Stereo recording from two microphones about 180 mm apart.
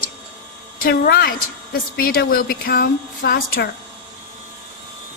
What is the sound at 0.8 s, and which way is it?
Speech, 60° left (ahead or behind).